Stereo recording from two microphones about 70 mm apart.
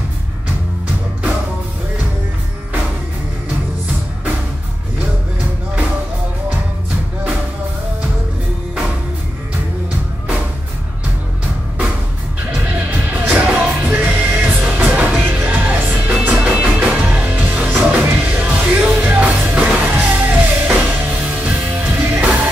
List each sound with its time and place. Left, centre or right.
12.4 s music: centre